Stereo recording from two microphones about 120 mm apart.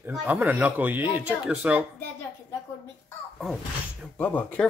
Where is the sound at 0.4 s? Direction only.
10° right (ahead or behind).